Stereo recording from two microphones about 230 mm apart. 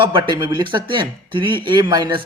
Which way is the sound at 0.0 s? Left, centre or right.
Centre.